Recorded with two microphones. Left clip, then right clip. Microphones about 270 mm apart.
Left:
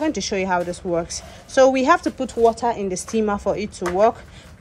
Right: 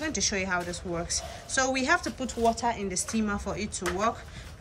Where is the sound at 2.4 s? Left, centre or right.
Left.